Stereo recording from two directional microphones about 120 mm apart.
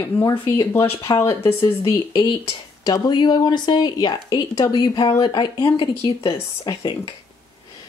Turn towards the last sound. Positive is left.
turn(degrees=40)  # may be behind; listen again after turning